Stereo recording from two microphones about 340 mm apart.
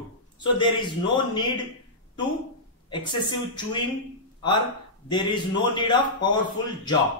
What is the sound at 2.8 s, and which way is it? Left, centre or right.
Speech, centre.